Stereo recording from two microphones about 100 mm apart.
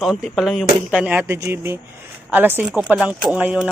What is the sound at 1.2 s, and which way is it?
Speech, 25° right (ahead or behind).